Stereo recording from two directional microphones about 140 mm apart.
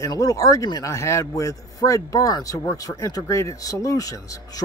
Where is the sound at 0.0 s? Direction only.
25° left (ahead or behind).